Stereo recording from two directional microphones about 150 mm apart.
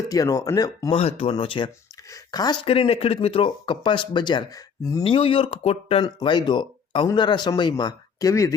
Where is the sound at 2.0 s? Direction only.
25° left (ahead or behind).